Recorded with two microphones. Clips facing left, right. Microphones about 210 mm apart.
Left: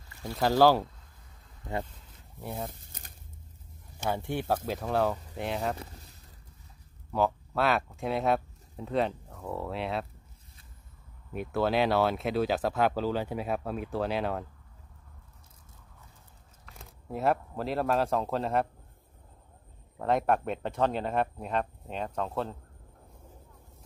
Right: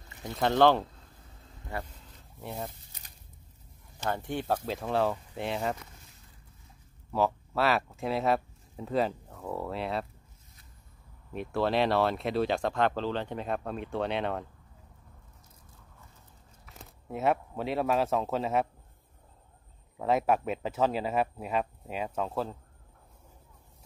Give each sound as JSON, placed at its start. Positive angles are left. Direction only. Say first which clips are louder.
{"t": 0.1, "sound": "a sound", "louder": "left 1 dB", "side_deg": -20}
{"t": 0.4, "sound": "speech", "louder": "left 1 dB", "side_deg": 5}
{"t": 2.4, "sound": "speech", "louder": "left 1 dB", "side_deg": 0}
{"t": 2.9, "sound": "a sound", "louder": "left 5 dB", "side_deg": 50}
{"t": 4.0, "sound": "speech", "louder": "left 1 dB", "side_deg": 10}
{"t": 7.1, "sound": "speech", "louder": "even", "side_deg": 0}
{"t": 11.3, "sound": "speech", "louder": "even", "side_deg": 0}
{"t": 16.6, "sound": "speech", "louder": "left 1 dB", "side_deg": 0}
{"t": 20.0, "sound": "speech", "louder": "even", "side_deg": -5}